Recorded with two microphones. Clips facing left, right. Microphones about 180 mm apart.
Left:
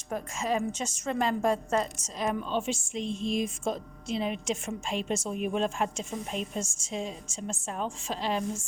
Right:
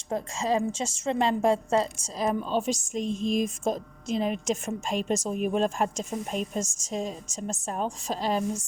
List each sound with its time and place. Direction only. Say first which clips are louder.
0.1 s a woman's voice: right 3 dB; 30° right (ahead or behind)